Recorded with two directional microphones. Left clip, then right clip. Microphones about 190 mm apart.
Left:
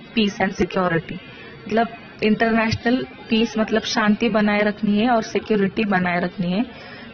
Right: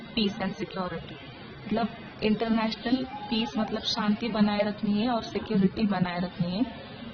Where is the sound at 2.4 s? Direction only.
25° left (ahead or behind).